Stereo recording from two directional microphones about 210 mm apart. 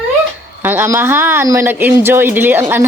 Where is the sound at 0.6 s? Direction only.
10° right (ahead or behind).